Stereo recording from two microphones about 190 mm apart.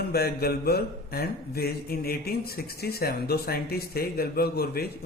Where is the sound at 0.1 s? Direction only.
55° left (ahead or behind).